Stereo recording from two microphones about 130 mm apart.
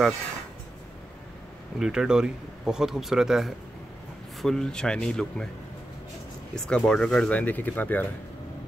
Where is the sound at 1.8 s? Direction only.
5° right (ahead or behind).